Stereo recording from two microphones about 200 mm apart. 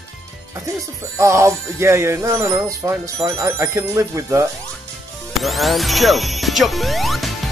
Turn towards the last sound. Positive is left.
turn(degrees=0)  # may be behind; listen again after turning